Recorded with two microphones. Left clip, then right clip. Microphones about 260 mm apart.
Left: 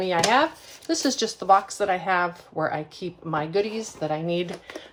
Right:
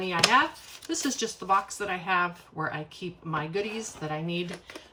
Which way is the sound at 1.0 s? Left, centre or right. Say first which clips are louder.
Left 8 dB; centre.